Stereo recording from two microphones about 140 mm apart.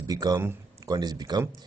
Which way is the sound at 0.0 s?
30° right (ahead or behind).